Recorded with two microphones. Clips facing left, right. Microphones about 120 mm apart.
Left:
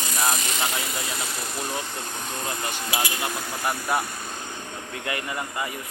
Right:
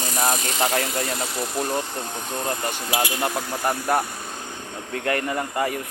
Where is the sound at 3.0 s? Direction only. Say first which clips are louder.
Right 5 dB; 40° right (ahead or behind).